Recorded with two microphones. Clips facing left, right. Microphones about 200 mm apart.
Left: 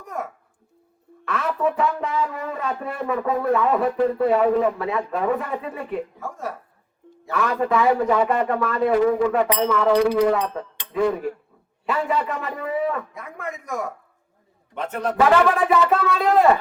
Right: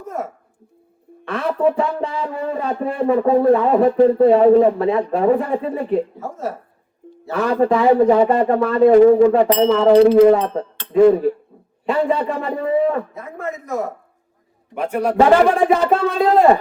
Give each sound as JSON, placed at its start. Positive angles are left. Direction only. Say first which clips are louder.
{"t": 1.2, "sound": "speech", "louder": "right 5 dB", "side_deg": -30}
{"t": 14.8, "sound": "speech", "louder": "right 6 dB", "side_deg": -10}
{"t": 15.1, "sound": "speech", "louder": "right 4 dB", "side_deg": -30}